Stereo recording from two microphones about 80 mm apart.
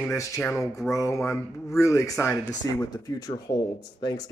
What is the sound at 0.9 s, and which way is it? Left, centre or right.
Speech, left.